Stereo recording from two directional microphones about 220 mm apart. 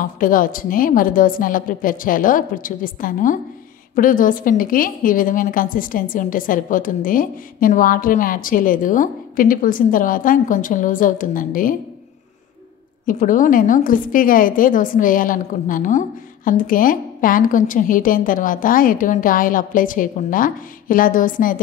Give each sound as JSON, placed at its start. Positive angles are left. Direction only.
{"t": 0.0, "sound": "a woman's voice", "side_deg": 40}
{"t": 13.0, "sound": "a woman's voice", "side_deg": 35}